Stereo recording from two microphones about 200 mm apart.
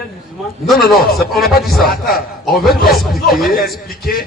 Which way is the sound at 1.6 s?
Centre (ahead or behind).